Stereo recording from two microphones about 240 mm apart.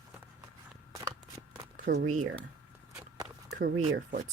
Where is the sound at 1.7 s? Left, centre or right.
Right.